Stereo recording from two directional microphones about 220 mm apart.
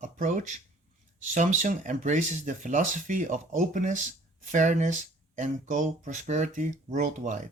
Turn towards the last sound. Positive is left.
turn(degrees=-35)  # may be behind; listen again after turning